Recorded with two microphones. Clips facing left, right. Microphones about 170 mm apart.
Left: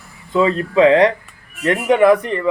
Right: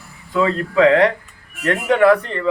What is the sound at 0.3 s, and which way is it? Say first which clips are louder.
A man's voice: left 2 dB; 20° left (ahead or behind).